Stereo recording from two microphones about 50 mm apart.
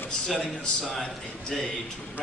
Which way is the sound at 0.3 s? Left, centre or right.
Centre.